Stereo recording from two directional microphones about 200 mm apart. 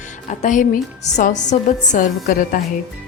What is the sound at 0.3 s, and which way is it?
A woman's voice, 40° left (ahead or behind).